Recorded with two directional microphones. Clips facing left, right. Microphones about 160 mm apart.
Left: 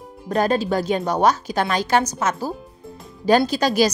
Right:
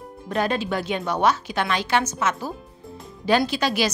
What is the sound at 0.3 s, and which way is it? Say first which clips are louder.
A woman's voice: left 4 dB; 40° left (ahead or behind).